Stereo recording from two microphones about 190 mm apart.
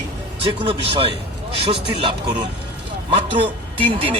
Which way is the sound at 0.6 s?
30° right (ahead or behind).